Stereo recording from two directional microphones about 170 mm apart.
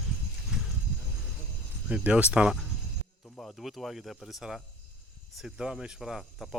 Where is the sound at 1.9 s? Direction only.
5° right (ahead or behind).